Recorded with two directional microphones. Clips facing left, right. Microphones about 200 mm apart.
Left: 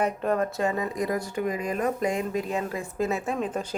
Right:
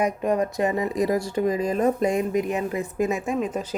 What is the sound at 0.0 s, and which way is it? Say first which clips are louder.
Speech: right 2 dB; 10° right (ahead or behind).